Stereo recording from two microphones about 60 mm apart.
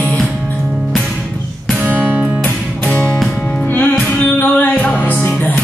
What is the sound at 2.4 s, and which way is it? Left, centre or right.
Music, left.